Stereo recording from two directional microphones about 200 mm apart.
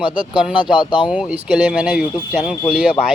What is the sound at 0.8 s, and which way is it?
Speech, 20° left (ahead or behind).